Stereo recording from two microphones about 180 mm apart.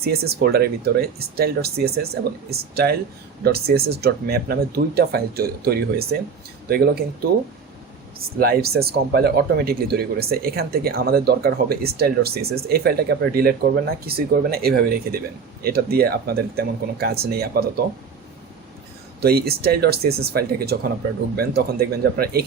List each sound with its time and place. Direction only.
0.0 s speech: 60° right (ahead or behind)
8.4 s speech: 60° right (ahead or behind)
19.2 s speech: 60° right (ahead or behind)